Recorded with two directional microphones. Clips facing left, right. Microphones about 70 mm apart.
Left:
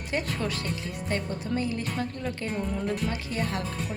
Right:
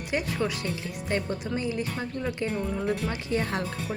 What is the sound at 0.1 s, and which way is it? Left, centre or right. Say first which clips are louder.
Speech: right 1 dB; centre.